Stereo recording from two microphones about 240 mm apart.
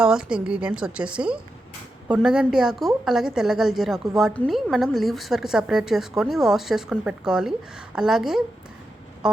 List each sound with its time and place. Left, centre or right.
0.0 s a woman's voice: centre
9.2 s music: centre